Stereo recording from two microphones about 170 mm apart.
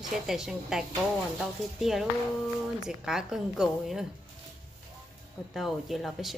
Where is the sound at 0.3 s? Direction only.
5° right (ahead or behind).